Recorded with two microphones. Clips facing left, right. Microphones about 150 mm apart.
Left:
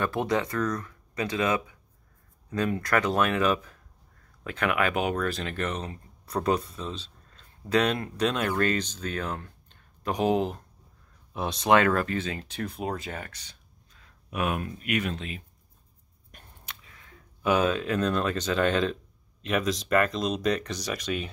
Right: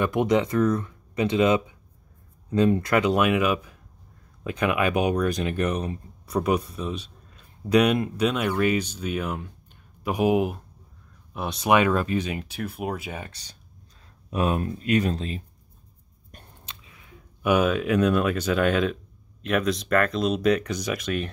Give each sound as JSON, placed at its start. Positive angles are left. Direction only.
{"t": 0.0, "sound": "speech", "side_deg": -15}
{"t": 11.7, "sound": "speech", "side_deg": -15}
{"t": 13.3, "sound": "speech", "side_deg": -35}
{"t": 16.6, "sound": "speech", "side_deg": -15}